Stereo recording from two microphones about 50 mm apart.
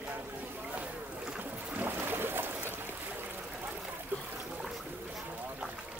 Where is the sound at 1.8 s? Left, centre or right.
Right.